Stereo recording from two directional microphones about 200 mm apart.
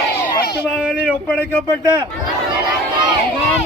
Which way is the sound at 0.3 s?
45° left (ahead or behind).